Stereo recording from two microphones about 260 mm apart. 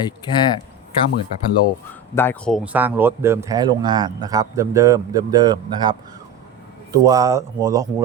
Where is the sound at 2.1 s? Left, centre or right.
Centre.